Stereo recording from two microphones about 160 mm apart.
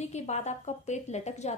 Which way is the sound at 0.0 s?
45° left (ahead or behind).